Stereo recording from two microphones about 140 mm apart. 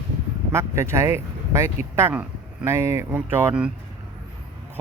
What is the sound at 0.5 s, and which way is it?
Speech, 20° right (ahead or behind).